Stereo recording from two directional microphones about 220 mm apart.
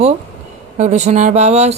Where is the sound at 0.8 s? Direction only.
30° right (ahead or behind).